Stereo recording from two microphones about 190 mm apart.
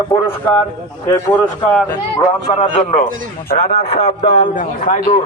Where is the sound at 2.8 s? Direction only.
40° left (ahead or behind).